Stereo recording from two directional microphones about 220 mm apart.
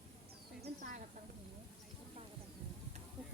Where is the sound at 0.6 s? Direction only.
35° right (ahead or behind).